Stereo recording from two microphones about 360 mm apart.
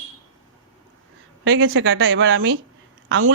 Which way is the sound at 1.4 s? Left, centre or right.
Right.